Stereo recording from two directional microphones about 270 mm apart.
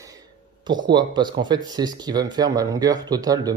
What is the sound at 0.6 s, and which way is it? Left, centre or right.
Speech, centre.